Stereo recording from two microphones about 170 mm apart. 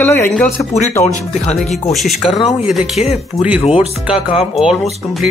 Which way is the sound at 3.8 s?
35° left (ahead or behind).